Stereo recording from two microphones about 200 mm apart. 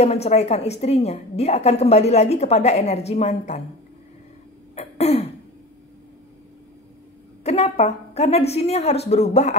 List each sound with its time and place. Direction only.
0.0 s a woman's voice: 30° left (ahead or behind)
4.7 s throat clearing: 30° left (ahead or behind)
7.4 s a woman's voice: 30° left (ahead or behind)